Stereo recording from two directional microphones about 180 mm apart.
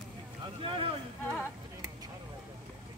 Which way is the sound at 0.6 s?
30° right (ahead or behind).